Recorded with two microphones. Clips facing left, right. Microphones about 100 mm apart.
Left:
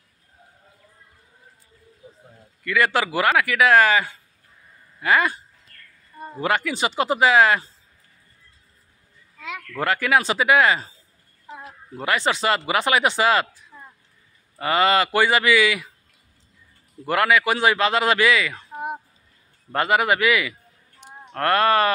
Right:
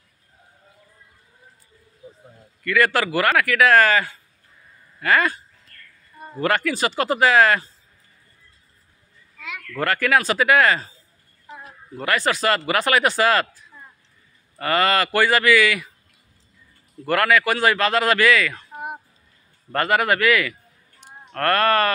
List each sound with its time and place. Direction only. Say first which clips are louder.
2.6 s a man's voice: right 1 dB; 15° left (ahead or behind)
6.4 s a man's voice: right 2 dB; 15° left (ahead or behind)
9.7 s a man's voice: right 1 dB; 15° left (ahead or behind)
17.0 s a man's voice: right 1 dB; 15° left (ahead or behind)
21.0 s a sound: right 1 dB; 20° left (ahead or behind)